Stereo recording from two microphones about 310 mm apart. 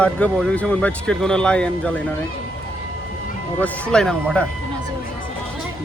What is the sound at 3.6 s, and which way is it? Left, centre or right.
Speech, centre.